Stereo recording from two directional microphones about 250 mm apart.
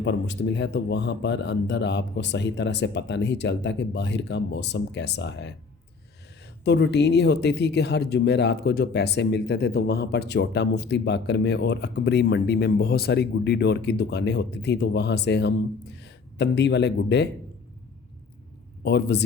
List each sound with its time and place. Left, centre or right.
0.0 s speech: left
6.7 s speech: left
18.8 s a man's voice: left